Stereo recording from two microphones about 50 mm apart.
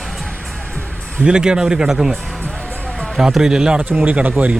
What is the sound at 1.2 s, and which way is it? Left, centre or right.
Speech, centre.